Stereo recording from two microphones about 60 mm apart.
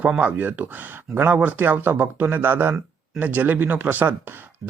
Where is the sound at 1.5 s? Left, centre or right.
Right.